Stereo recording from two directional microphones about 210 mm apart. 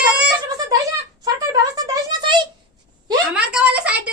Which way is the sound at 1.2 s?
15° right (ahead or behind).